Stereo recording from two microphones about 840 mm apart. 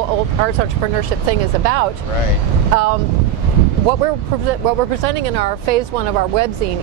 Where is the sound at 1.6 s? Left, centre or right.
Right.